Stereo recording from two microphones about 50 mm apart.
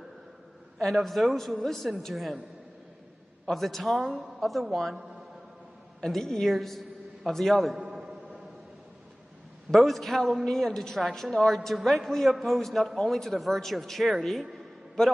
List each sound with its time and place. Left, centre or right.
0.8 s a man's voice: centre
3.4 s a man's voice: centre
5.9 s a man's voice: centre
8.0 s a sound: centre
9.7 s a man's voice: centre